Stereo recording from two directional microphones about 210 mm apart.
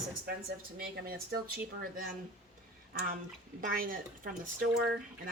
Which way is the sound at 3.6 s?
40° right (ahead or behind).